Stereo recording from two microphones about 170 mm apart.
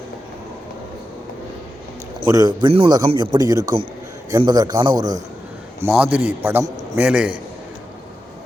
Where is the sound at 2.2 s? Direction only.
20° right (ahead or behind).